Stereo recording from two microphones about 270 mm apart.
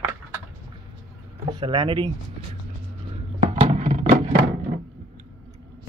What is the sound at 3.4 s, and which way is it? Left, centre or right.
Music, right.